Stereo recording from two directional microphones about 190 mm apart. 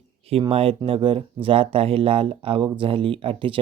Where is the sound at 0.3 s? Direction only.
30° right (ahead or behind).